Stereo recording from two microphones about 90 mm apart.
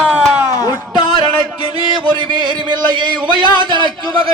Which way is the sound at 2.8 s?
60° right (ahead or behind).